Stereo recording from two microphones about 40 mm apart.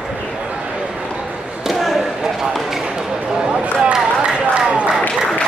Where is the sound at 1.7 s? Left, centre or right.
Centre.